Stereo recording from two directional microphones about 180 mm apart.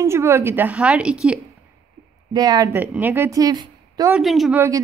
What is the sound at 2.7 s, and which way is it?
A woman's voice, 10° right (ahead or behind).